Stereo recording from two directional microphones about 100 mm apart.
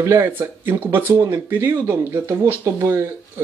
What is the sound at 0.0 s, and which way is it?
Speech, 25° right (ahead or behind).